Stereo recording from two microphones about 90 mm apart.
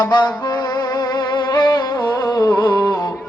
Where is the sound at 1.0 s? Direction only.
50° left (ahead or behind).